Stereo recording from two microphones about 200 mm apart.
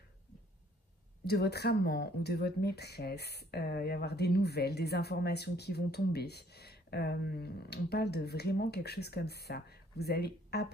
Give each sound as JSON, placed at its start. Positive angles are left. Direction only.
{"t": 1.2, "sound": "speech", "side_deg": 55}